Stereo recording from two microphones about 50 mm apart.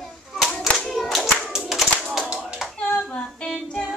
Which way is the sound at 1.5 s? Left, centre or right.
Centre.